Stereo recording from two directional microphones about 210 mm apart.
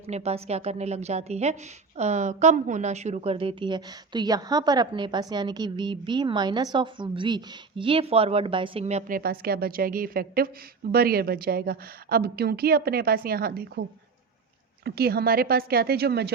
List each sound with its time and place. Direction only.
0.1 s a woman's voice: 30° right (ahead or behind); by 13.8 s 45° right (ahead or behind)
14.8 s a woman's voice: 50° right (ahead or behind)